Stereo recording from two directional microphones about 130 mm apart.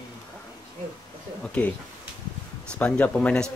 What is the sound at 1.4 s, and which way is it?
Speech, 10° left (ahead or behind).